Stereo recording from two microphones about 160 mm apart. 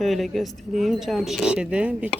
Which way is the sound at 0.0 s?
Centre (ahead or behind).